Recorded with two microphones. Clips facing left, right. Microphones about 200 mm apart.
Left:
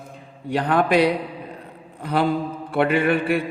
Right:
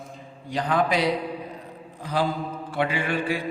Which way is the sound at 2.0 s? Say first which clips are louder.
Left 4 dB; 60° left (ahead or behind).